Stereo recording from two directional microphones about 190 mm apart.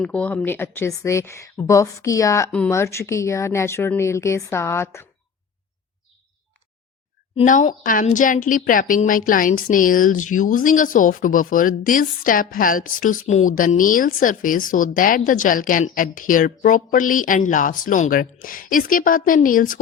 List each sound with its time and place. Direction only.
0.0 s speech: 5° left (ahead or behind)
7.4 s speech: 45° left (ahead or behind)